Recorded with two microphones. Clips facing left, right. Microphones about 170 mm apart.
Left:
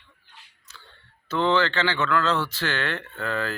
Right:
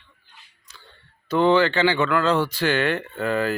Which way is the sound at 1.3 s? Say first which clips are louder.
Right 5 dB; 15° right (ahead or behind).